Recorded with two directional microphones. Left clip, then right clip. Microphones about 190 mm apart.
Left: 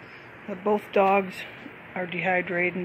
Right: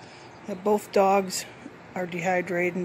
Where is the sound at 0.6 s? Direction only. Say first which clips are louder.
Even; 10° right (ahead or behind).